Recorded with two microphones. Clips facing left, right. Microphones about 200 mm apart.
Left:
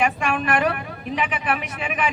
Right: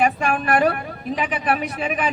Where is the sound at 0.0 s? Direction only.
35° right (ahead or behind).